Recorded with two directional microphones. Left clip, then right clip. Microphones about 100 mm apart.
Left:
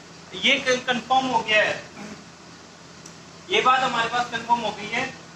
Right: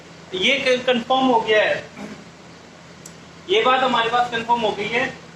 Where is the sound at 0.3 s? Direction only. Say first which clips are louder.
Right 3 dB; 30° right (ahead or behind).